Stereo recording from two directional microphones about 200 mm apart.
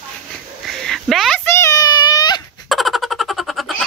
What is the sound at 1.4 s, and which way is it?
Child singing, 15° left (ahead or behind).